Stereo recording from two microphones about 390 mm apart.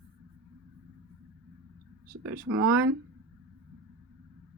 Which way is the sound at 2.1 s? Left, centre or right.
Right.